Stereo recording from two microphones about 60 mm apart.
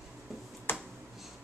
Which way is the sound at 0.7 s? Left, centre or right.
Left.